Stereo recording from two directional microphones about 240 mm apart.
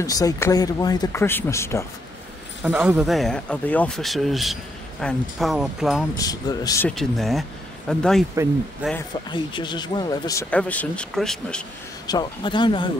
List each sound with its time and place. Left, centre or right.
0.0 s speech: centre
2.6 s speech: centre
6.1 s speech: centre
7.0 s speech: centre
9.3 s speech: centre
12.1 s speech: centre